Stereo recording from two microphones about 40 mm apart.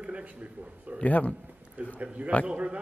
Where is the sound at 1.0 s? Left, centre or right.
Left.